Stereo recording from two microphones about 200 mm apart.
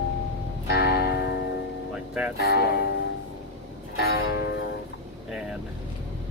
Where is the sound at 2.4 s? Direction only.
55° left (ahead or behind).